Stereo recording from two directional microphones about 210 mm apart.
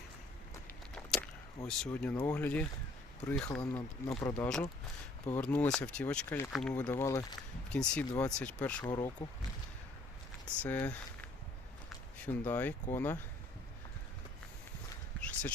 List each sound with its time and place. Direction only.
1.6 s speech: 5° left (ahead or behind)
7.7 s speech: 5° left (ahead or behind)
8.9 s speech: 20° left (ahead or behind)
10.6 s speech: 10° left (ahead or behind)
11.9 s a sound: 10° left (ahead or behind)
12.8 s speech: 10° left (ahead or behind)
15.2 s a sound: 10° left (ahead or behind)